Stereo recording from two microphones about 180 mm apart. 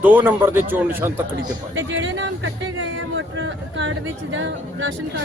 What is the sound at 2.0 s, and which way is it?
Speech, 90° right.